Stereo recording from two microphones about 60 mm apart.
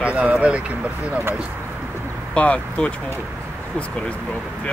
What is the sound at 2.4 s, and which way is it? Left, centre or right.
Speech, centre.